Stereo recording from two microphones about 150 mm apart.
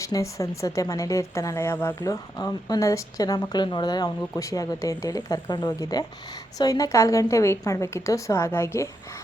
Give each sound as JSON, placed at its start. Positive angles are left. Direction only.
{"t": 0.0, "sound": "speech", "side_deg": 20}